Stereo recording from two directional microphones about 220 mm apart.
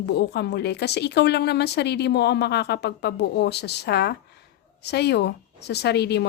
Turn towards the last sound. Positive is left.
turn(degrees=50)  # may be behind; listen again after turning